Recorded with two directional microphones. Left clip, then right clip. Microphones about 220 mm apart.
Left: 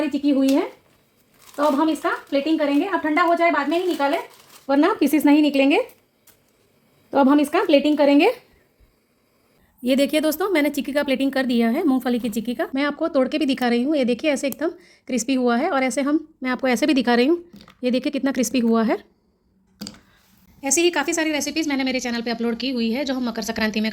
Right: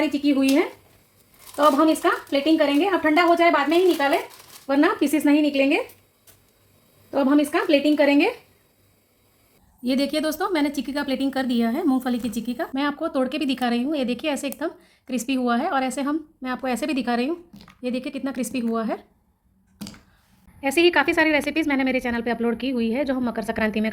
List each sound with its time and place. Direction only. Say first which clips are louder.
0.1 s speech: left 1 dB; 15° left (ahead or behind)
1.5 s speech: right 2 dB; 15° left (ahead or behind)
4.6 s a woman's voice: left 2 dB; 25° left (ahead or behind)
7.1 s a woman's voice: left 3 dB; 40° left (ahead or behind)
9.8 s a woman's voice: left 4 dB; 35° left (ahead or behind)
20.6 s a woman's voice: right 2 dB; 5° left (ahead or behind)